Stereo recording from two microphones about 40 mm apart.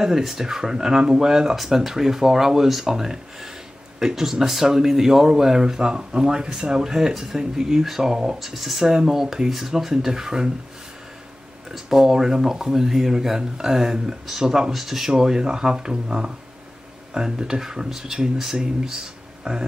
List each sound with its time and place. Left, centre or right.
0.0 s speech: centre
8.4 s speech: centre
11.7 s speech: centre